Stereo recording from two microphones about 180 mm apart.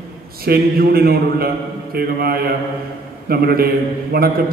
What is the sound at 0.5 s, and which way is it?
A man's voice, 60° right (ahead or behind).